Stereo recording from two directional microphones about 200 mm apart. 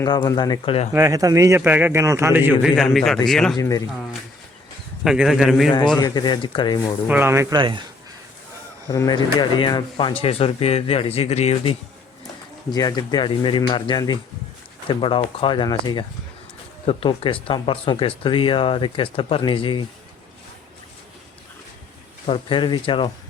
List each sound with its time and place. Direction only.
0.0 s speech: 20° left (ahead or behind)
0.9 s a man's voice: 15° right (ahead or behind); by 3.6 s centre (ahead or behind)
3.6 s speech: 15° left (ahead or behind)
5.0 s a man's voice: centre (ahead or behind)
6.0 s speech: 20° left (ahead or behind)
7.1 s a man's voice: 10° right (ahead or behind)
7.6 s speech: 25° right (ahead or behind)
8.9 s speech: 20° left (ahead or behind)
12.7 s speech: 20° left (ahead or behind)
22.3 s speech: 25° left (ahead or behind)